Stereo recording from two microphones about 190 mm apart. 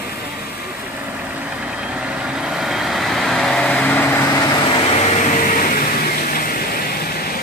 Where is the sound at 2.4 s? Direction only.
Centre (ahead or behind); by 5.5 s 30° left (ahead or behind).